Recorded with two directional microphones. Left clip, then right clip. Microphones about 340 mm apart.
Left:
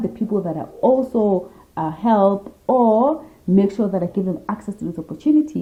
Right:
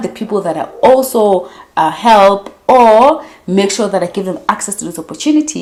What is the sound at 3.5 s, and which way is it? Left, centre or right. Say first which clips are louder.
A woman's voice: right 7 dB; centre.